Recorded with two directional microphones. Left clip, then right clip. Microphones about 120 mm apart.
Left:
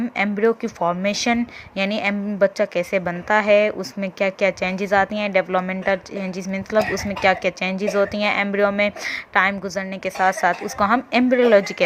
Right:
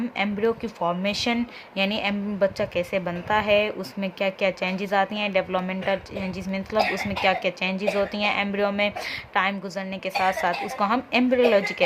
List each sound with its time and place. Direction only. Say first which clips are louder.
0.2 s a woman's voice: left 5 dB; 40° left (ahead or behind)